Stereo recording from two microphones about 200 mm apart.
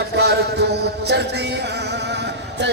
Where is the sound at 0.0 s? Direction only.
55° right (ahead or behind).